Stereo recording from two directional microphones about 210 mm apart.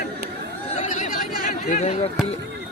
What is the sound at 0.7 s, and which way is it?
Chatter, 35° left (ahead or behind).